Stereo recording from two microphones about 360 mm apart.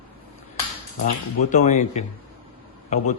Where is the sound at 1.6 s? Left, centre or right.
Centre.